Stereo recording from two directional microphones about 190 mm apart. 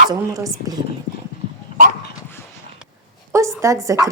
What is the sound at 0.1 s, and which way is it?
Speech, 15° right (ahead or behind).